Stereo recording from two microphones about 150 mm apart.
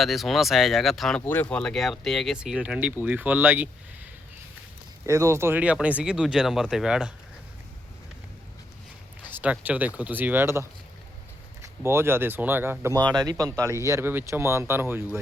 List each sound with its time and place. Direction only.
0.0 s speech: centre (ahead or behind)
1.2 s speech: 15° left (ahead or behind); by 3.7 s 10° right (ahead or behind)
5.0 s speech: 20° right (ahead or behind); by 7.1 s 5° right (ahead or behind)
9.3 s speech: 10° right (ahead or behind)
13.0 s speech: 25° right (ahead or behind)